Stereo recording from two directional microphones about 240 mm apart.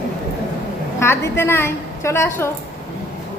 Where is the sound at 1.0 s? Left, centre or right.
Centre.